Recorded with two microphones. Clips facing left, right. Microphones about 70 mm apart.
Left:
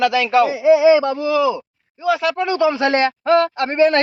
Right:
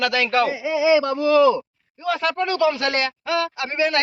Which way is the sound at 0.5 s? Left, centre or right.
Left.